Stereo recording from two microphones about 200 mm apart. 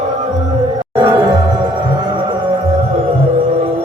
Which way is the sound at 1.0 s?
20° right (ahead or behind).